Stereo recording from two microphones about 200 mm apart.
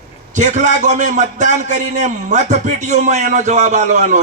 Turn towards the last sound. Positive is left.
turn(degrees=-35)  # may be behind; listen again after turning